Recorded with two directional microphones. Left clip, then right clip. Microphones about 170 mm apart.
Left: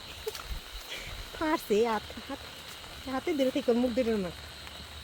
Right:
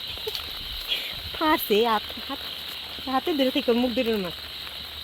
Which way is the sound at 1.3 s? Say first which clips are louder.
Right 6 dB; 45° right (ahead or behind).